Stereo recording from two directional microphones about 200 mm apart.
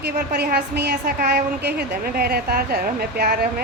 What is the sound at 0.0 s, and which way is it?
A woman's voice, 55° right (ahead or behind).